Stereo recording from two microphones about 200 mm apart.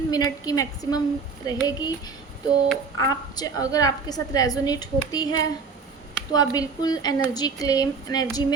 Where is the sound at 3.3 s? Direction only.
20° left (ahead or behind).